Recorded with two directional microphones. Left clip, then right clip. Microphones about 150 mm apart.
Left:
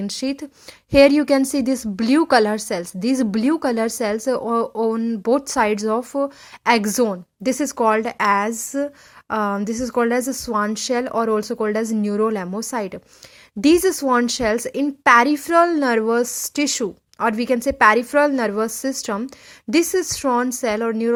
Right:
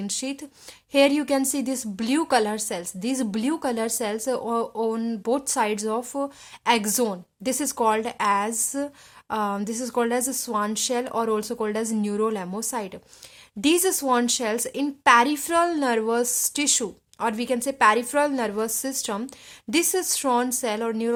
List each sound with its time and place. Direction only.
0.0 s a woman's voice: 30° left (ahead or behind)